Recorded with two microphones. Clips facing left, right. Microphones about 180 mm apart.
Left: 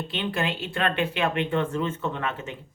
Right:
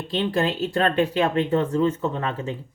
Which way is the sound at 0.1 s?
35° right (ahead or behind).